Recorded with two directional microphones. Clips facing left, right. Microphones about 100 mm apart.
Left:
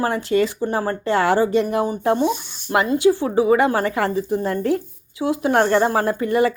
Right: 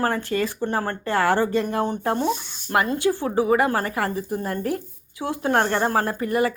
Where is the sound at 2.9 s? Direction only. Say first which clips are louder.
Left 5 dB; 15° left (ahead or behind).